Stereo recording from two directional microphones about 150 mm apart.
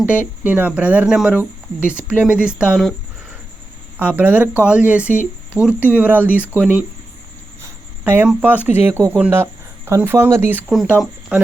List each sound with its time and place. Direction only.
0.0 s speech: 10° right (ahead or behind)
3.9 s speech: 10° right (ahead or behind)
8.0 s speech: 10° right (ahead or behind)